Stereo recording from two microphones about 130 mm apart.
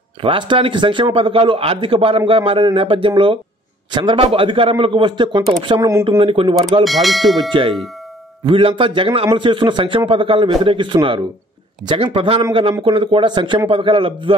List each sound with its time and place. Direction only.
0.2 s a man's voice: 40° right (ahead or behind)
6.8 s speech: centre (ahead or behind)
8.5 s a man's voice: 40° right (ahead or behind)